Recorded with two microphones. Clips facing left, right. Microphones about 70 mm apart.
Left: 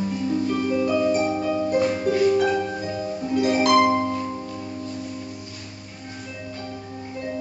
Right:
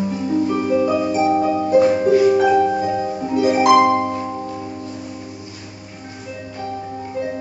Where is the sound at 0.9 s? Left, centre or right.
Centre; by 3.3 s right.